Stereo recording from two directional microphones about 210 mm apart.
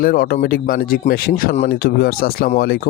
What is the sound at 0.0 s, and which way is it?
Speech, 45° left (ahead or behind).